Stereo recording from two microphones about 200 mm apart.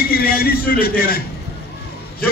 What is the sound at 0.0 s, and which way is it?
A man's voice, 50° left (ahead or behind).